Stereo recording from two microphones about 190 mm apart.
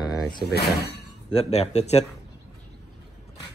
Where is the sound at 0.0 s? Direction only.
20° left (ahead or behind).